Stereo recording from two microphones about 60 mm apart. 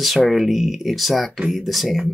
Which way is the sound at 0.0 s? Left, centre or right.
Centre.